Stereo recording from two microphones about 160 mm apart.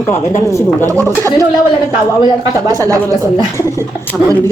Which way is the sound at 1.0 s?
20° right (ahead or behind).